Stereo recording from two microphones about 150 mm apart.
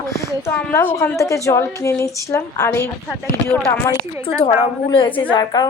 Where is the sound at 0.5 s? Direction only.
15° left (ahead or behind).